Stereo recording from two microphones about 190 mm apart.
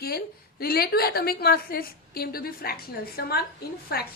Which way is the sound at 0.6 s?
55° left (ahead or behind).